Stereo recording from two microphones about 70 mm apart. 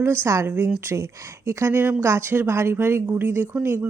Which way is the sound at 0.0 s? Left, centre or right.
Right.